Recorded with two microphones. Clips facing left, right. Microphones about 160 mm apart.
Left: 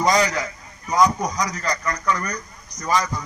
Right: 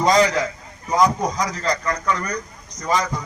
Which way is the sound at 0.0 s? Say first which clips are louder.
Right 3 dB; 25° right (ahead or behind).